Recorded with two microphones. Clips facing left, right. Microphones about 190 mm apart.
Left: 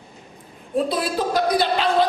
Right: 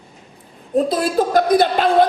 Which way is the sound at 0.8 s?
45° right (ahead or behind).